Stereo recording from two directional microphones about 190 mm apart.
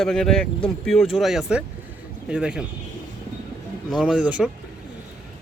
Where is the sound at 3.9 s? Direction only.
5° right (ahead or behind).